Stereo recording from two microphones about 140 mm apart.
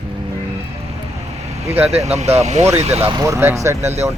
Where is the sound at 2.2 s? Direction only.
55° right (ahead or behind).